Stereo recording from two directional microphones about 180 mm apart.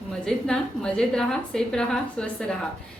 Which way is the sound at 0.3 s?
5° left (ahead or behind).